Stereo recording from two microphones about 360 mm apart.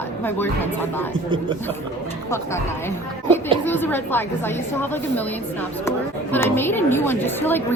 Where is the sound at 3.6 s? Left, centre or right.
Centre.